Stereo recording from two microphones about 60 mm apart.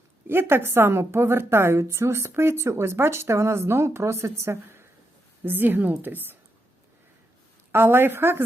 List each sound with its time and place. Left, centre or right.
0.3 s speech: right
5.4 s a woman's voice: right
7.7 s a woman's voice: right